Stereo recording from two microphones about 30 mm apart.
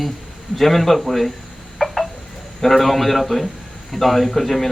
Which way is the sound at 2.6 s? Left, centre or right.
Centre.